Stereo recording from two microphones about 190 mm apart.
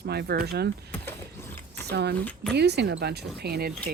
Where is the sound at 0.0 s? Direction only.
60° right (ahead or behind).